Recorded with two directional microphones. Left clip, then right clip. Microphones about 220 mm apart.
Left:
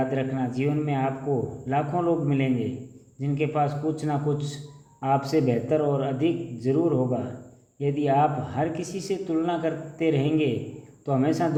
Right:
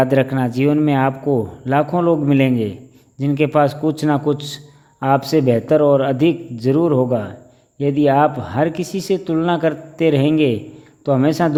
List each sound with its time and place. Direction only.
0.0 s a man's voice: 50° right (ahead or behind)